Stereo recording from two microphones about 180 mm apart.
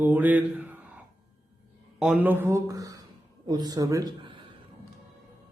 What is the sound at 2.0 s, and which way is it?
A man's voice, 5° right (ahead or behind).